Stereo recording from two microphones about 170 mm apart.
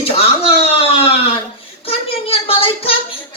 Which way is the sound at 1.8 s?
35° left (ahead or behind).